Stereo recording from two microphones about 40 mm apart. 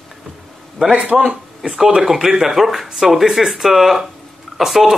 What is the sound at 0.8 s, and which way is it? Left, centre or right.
Speech, right.